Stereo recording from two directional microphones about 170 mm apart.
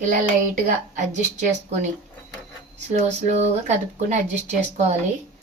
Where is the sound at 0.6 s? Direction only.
45° right (ahead or behind).